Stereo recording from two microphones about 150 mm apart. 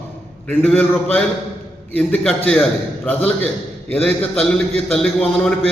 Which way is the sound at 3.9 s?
10° left (ahead or behind).